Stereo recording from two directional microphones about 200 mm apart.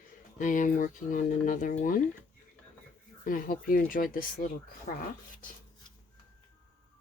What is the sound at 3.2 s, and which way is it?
Speech, 45° left (ahead or behind).